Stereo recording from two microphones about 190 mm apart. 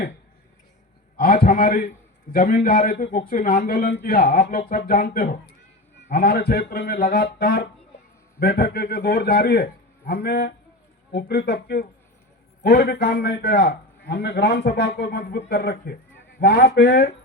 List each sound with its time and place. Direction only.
1.1 s a man's voice: 50° left (ahead or behind)